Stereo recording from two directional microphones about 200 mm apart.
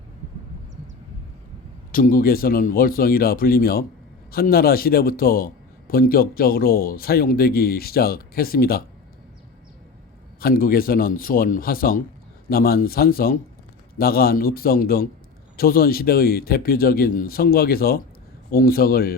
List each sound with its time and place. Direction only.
1.9 s a man's voice: 45° left (ahead or behind)
10.4 s a man's voice: 45° left (ahead or behind)